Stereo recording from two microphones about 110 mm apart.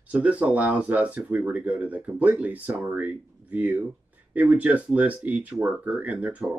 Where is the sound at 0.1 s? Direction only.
15° right (ahead or behind).